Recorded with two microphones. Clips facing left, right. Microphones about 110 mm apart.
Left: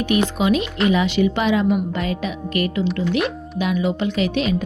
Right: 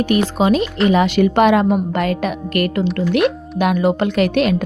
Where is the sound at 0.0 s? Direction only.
35° right (ahead or behind).